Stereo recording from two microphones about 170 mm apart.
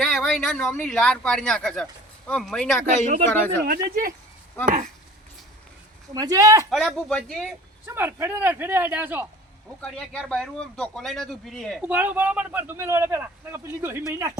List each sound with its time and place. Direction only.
0.0 s speech: centre (ahead or behind)
3.0 s speech: 50° right (ahead or behind)
3.2 s speech: 15° left (ahead or behind)
3.6 s speech: 60° right (ahead or behind)
4.6 s speech: 50° right (ahead or behind)
6.1 s speech: 20° right (ahead or behind)
6.7 s a man's voice: centre (ahead or behind)
7.9 s speech: 15° right (ahead or behind)
9.8 s a man's voice: 5° left (ahead or behind)
11.9 s speech: 10° right (ahead or behind)